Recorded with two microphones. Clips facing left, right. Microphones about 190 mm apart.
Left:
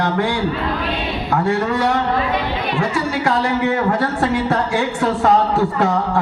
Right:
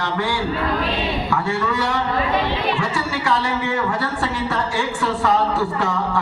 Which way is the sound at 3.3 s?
55° left (ahead or behind).